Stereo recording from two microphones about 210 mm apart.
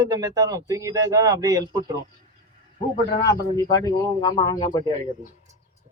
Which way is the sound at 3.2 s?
15° left (ahead or behind).